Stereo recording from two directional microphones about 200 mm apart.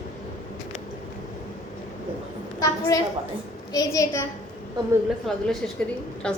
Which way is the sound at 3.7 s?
15° left (ahead or behind).